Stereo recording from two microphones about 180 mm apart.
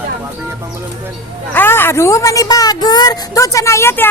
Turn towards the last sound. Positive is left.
turn(degrees=15)  # may be behind; listen again after turning